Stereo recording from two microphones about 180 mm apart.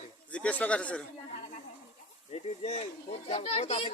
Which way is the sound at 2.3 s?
35° left (ahead or behind).